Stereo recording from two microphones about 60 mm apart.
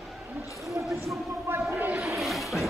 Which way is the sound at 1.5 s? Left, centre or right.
Right.